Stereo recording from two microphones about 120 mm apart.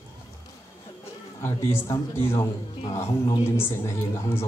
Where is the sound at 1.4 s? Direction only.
20° left (ahead or behind).